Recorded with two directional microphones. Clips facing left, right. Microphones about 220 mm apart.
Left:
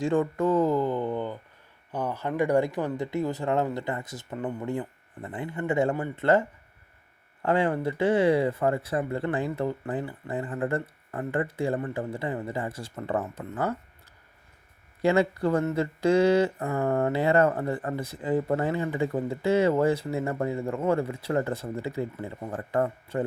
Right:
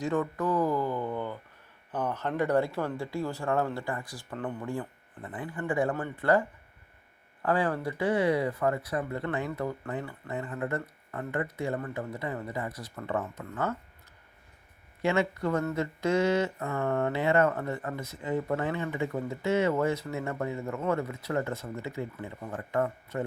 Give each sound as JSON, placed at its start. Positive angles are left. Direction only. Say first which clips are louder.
{"t": 0.0, "sound": "speech", "louder": "left 5 dB", "side_deg": 30}
{"t": 7.4, "sound": "speech", "louder": "left 3 dB", "side_deg": 25}
{"t": 15.0, "sound": "a sound", "louder": "left 4 dB", "side_deg": 35}